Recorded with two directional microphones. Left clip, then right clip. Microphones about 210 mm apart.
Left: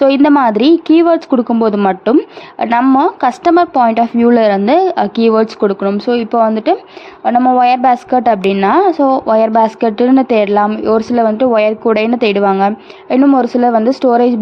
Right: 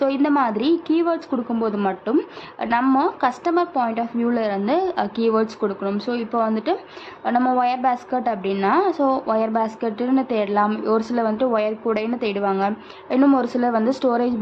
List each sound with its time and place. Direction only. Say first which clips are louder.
0.0 s speech: left 10 dB; 40° left (ahead or behind)